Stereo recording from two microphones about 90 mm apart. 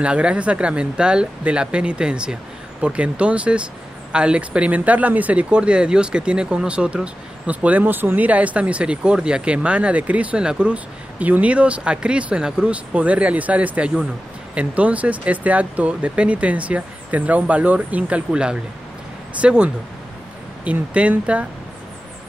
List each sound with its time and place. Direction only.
0.0 s speech: 10° right (ahead or behind)